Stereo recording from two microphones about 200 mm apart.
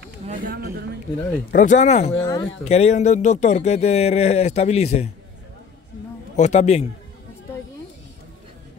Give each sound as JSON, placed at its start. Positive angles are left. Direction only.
{"t": 0.3, "sound": "a sound", "side_deg": -45}
{"t": 1.5, "sound": "speech", "side_deg": 40}
{"t": 2.1, "sound": "speech", "side_deg": 20}
{"t": 2.6, "sound": "speech", "side_deg": 35}
{"t": 6.3, "sound": "speech", "side_deg": 35}